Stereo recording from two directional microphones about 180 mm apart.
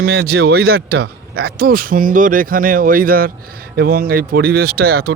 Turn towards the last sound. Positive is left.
turn(degrees=-60)  # may be behind; listen again after turning